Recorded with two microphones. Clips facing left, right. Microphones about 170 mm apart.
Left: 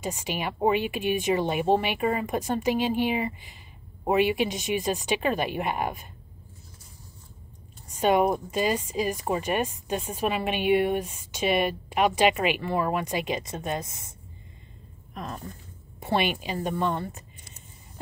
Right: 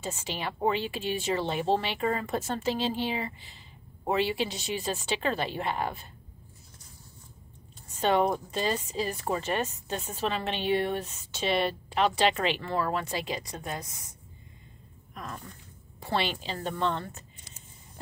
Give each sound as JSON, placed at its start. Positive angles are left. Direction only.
{"t": 0.0, "sound": "speech", "side_deg": 15}
{"t": 7.9, "sound": "speech", "side_deg": 10}
{"t": 15.1, "sound": "speech", "side_deg": 25}